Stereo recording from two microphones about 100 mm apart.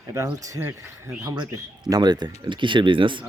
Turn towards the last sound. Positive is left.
turn(degrees=-55)  # may be behind; listen again after turning